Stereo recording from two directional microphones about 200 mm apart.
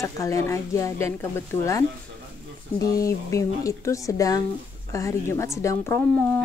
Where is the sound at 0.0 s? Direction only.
15° left (ahead or behind).